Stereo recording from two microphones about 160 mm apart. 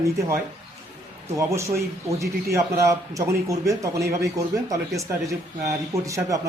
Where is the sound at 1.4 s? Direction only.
20° right (ahead or behind).